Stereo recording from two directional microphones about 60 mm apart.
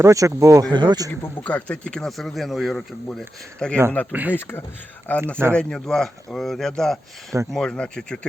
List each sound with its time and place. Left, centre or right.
0.0 s speech: right
1.4 s speech: left; by 2.8 s centre
3.6 s speech: centre
4.1 s speech: right
4.4 s speech: left
5.1 s speech: left
5.5 s speech: centre